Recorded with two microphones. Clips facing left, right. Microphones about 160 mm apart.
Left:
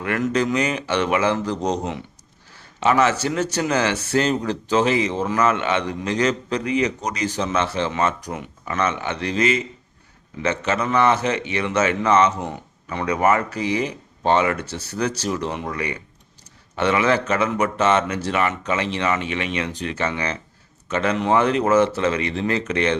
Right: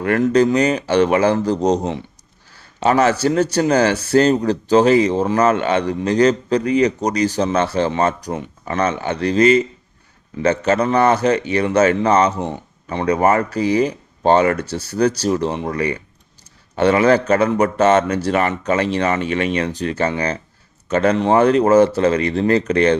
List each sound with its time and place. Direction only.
0.0 s speech: 35° right (ahead or behind)